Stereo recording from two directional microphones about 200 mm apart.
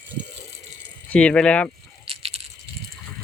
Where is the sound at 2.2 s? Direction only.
30° right (ahead or behind).